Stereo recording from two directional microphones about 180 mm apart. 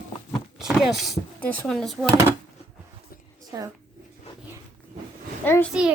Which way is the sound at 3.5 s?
20° right (ahead or behind).